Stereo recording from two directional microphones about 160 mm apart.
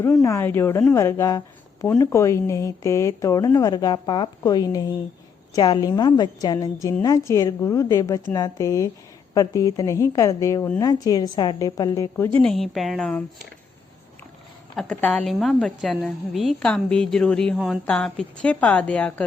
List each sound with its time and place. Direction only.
0.2 s a woman's voice: 15° left (ahead or behind)
12.4 s a woman's voice: 5° left (ahead or behind)
14.8 s a woman's voice: 5° left (ahead or behind)